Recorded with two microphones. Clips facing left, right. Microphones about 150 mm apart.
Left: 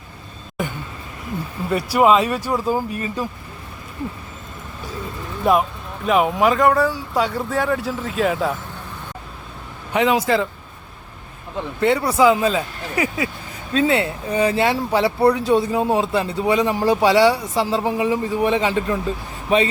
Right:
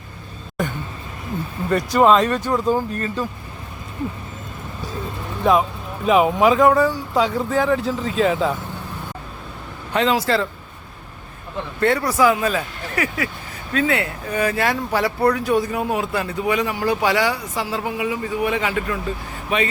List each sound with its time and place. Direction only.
1.7 s speech: 10° left (ahead or behind)
5.4 s speech: 5° left (ahead or behind)
9.9 s speech: 15° left (ahead or behind)
11.8 s speech: 20° left (ahead or behind)